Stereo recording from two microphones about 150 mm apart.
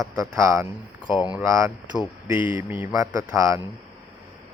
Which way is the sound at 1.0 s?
30° left (ahead or behind).